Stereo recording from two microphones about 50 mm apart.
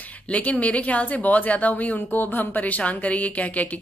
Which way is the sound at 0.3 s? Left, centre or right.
Left.